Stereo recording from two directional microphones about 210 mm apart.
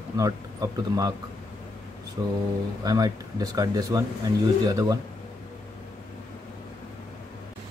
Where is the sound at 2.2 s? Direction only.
20° right (ahead or behind).